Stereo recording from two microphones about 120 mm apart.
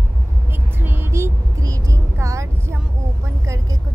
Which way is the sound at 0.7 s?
15° right (ahead or behind).